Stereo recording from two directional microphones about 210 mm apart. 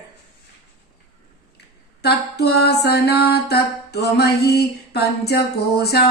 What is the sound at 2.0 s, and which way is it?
Music, 50° left (ahead or behind).